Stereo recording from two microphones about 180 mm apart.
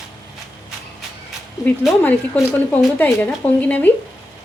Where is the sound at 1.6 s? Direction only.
10° left (ahead or behind).